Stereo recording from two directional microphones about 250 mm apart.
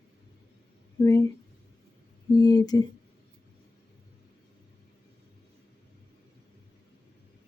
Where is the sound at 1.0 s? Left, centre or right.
Centre.